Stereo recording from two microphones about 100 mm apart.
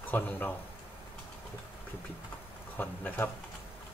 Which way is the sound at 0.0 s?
20° left (ahead or behind).